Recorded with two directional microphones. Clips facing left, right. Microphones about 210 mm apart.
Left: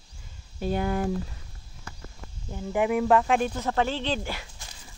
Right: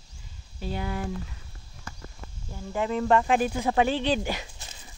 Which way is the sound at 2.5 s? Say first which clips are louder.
Left 4 dB; 15° left (ahead or behind).